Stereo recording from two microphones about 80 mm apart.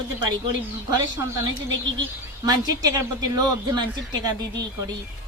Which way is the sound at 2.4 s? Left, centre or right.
Right.